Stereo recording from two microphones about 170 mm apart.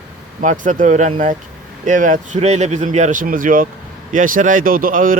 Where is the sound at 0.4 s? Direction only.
50° right (ahead or behind).